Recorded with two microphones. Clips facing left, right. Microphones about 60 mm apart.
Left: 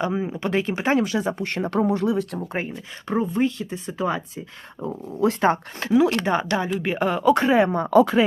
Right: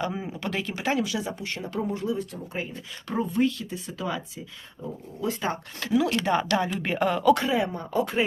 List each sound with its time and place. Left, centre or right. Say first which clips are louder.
0.0 s speech: left 6 dB; left
3.1 s speech: left 3 dB; left
4.8 s speech: left 9 dB; left
5.9 s speech: left 4 dB; left
6.7 s speech: left 3 dB; centre
7.5 s speech: left 8 dB; left